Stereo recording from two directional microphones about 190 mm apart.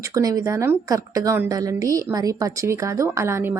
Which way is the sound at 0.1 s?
20° right (ahead or behind).